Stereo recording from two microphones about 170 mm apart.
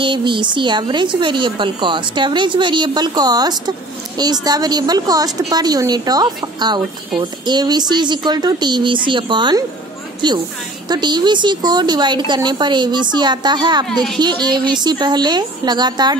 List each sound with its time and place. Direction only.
0.0 s speech: 30° right (ahead or behind)